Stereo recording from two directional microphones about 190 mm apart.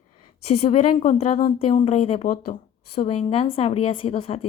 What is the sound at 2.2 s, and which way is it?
Speech, 45° left (ahead or behind).